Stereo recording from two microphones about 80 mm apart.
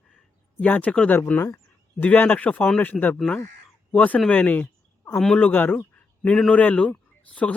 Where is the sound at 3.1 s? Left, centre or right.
Centre.